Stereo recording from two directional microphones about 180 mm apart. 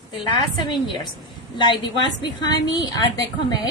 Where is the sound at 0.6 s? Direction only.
25° left (ahead or behind).